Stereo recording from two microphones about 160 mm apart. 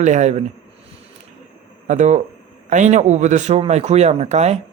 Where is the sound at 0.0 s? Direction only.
45° right (ahead or behind).